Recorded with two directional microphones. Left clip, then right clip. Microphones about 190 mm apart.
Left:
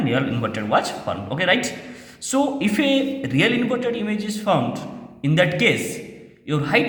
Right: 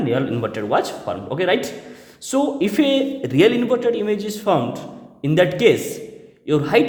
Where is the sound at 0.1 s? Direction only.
40° right (ahead or behind).